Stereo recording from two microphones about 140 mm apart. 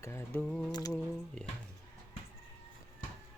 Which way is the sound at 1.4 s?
5° left (ahead or behind).